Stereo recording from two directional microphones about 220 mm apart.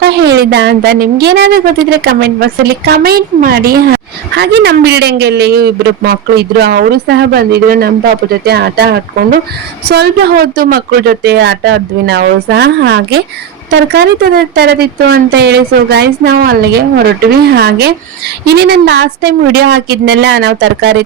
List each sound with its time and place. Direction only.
0.0 s a woman's voice: 50° right (ahead or behind)